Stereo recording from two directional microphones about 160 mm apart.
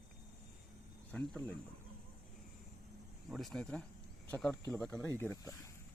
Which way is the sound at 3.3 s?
Centre (ahead or behind).